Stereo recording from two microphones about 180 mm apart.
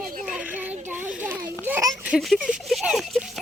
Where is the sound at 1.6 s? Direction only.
10° right (ahead or behind).